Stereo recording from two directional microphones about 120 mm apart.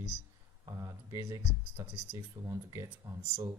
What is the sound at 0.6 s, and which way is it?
Speech, 30° right (ahead or behind).